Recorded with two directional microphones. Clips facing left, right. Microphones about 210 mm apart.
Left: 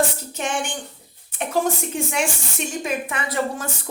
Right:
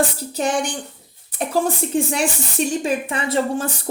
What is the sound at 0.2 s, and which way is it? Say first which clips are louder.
A woman's voice: right 5 dB; 35° right (ahead or behind).